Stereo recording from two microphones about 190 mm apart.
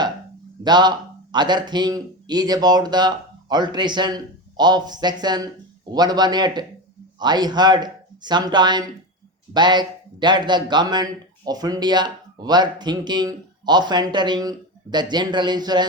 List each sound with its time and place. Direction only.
0.6 s speech: 20° right (ahead or behind)